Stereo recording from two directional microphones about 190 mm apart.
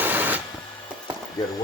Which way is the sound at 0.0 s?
10° right (ahead or behind).